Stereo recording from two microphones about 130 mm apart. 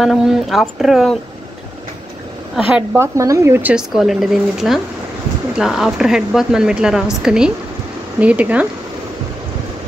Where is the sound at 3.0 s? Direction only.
25° right (ahead or behind).